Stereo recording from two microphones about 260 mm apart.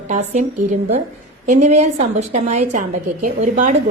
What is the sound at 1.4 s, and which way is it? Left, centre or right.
Speech, right.